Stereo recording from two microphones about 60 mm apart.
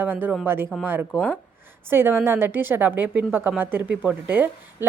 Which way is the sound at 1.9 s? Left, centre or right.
Right.